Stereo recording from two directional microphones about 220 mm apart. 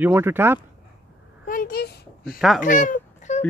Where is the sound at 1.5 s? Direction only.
40° left (ahead or behind).